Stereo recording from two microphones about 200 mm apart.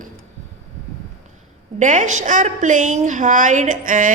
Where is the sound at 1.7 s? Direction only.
40° right (ahead or behind).